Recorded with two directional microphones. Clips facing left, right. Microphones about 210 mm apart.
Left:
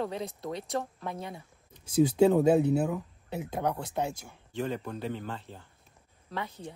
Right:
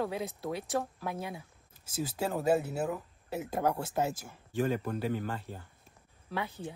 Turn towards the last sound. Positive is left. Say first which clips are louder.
# right 1 dB
turn(degrees=-5)  # may be behind; listen again after turning